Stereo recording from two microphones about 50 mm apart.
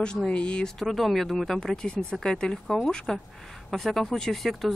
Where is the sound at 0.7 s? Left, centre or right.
Centre.